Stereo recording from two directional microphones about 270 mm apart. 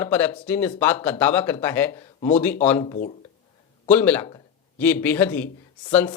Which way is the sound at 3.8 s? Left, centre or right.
Centre.